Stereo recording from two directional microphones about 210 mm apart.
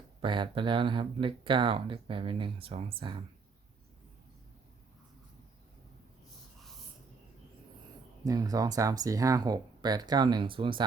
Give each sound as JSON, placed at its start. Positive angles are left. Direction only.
{"t": 0.2, "sound": "speech", "side_deg": -25}
{"t": 8.2, "sound": "speech", "side_deg": -15}